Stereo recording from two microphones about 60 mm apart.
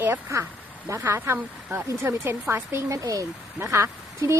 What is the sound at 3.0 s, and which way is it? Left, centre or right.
Speech, right.